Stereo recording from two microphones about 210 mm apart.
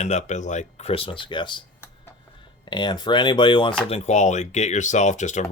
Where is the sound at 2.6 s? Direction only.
20° left (ahead or behind).